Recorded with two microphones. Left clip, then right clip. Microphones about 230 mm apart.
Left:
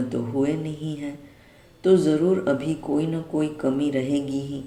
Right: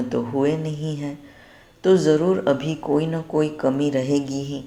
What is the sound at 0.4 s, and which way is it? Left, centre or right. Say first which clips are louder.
Speech: right 4 dB; centre.